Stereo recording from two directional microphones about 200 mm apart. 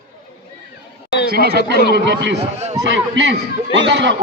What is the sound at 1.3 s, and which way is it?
A man's voice, 50° right (ahead or behind).